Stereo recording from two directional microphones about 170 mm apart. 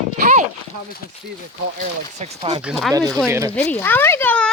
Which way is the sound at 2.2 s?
35° right (ahead or behind).